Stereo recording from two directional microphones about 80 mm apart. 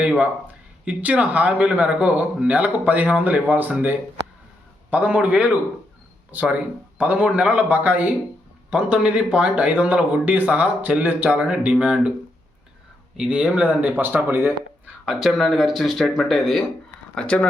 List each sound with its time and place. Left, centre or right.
0.2 s a man's voice: centre
13.1 s a man's voice: centre
15.0 s speech: centre
17.2 s speech: centre